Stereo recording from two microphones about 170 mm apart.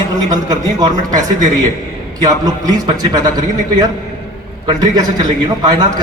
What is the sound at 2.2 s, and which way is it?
A man's voice, 20° right (ahead or behind).